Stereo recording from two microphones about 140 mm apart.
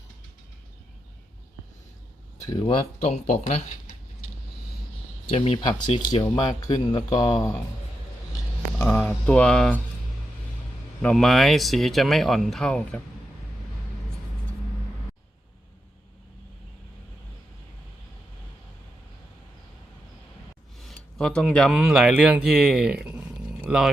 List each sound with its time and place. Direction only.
2.4 s speech: 25° left (ahead or behind)
2.6 s speech: 45° left (ahead or behind)
5.6 s speech: 30° left (ahead or behind)
8.8 s speech: 10° left (ahead or behind)
11.0 s speech: 5° left (ahead or behind)
20.7 s speech: centre (ahead or behind)